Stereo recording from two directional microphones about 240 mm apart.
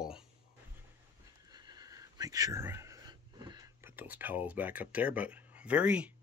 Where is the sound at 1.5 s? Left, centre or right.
Centre.